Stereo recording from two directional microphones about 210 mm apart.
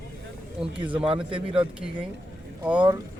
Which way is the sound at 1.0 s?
25° right (ahead or behind).